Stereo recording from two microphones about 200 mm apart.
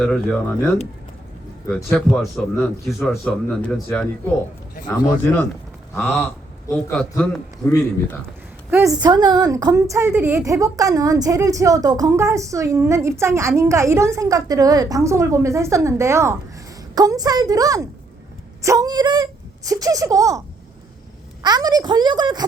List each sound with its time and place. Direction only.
0.0 s speech: 5° left (ahead or behind)
1.7 s a man's voice: 5° left (ahead or behind)
4.9 s a man's voice: 20° left (ahead or behind)
5.9 s a man's voice: 5° left (ahead or behind)
9.0 s a woman's voice: 20° right (ahead or behind)
21.4 s speech: 20° right (ahead or behind)